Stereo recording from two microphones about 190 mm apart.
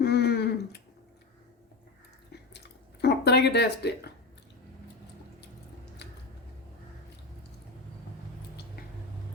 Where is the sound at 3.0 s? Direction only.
60° left (ahead or behind).